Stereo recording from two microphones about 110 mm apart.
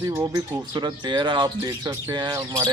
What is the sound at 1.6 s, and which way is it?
Speech, 30° right (ahead or behind).